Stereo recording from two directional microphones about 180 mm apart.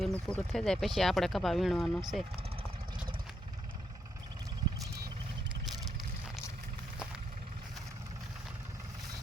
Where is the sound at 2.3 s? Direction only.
30° right (ahead or behind).